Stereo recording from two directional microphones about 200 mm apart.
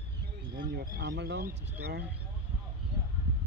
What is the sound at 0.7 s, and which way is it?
Speech, 55° right (ahead or behind).